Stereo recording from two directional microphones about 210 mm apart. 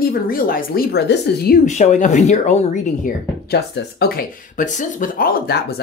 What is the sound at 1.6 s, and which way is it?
Speech, 35° left (ahead or behind).